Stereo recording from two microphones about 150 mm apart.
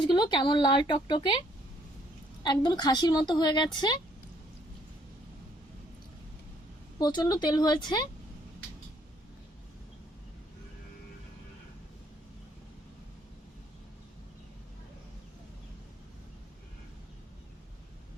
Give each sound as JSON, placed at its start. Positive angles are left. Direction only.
{"t": 0.0, "sound": "speech", "side_deg": 30}
{"t": 2.4, "sound": "a woman's voice", "side_deg": 30}
{"t": 7.0, "sound": "a woman's voice", "side_deg": 30}